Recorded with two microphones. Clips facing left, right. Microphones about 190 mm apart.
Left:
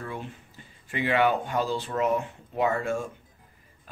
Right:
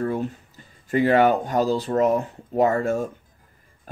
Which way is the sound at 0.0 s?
40° right (ahead or behind).